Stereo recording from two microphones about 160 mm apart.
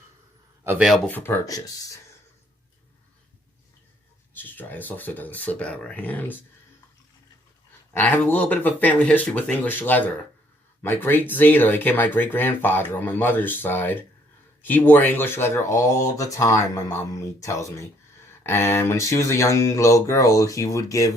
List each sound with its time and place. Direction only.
0.6 s a man's voice: 10° right (ahead or behind)
0.9 s speech: centre (ahead or behind)
1.1 s speech: 15° left (ahead or behind)
4.4 s speech: 10° left (ahead or behind)
7.9 s speech: 10° left (ahead or behind)